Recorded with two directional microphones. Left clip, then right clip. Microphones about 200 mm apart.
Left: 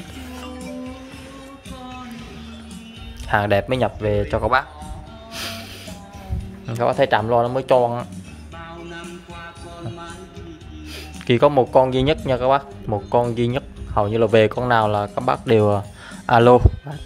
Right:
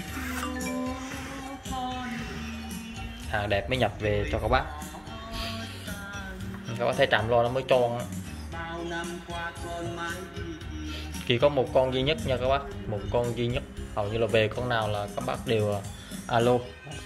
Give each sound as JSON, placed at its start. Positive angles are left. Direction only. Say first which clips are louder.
{"t": 3.3, "sound": "speech", "louder": "left 10 dB", "side_deg": 45}
{"t": 5.3, "sound": "music", "louder": "left 6 dB", "side_deg": 45}
{"t": 6.7, "sound": "speech", "louder": "left 7 dB", "side_deg": 30}
{"t": 11.2, "sound": "speech", "louder": "left 8 dB", "side_deg": 35}